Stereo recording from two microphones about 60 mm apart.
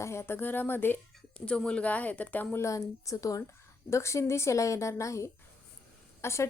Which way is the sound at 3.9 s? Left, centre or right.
Left.